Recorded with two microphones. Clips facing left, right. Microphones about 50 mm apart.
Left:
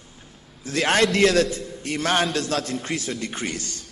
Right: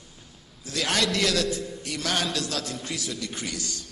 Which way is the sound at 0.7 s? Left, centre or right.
Left.